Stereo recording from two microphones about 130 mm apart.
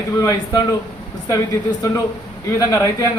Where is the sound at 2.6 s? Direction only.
25° left (ahead or behind).